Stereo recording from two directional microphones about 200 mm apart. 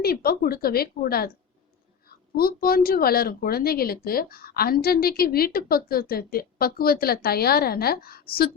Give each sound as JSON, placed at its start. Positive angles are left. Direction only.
{"t": 0.0, "sound": "speech", "side_deg": 50}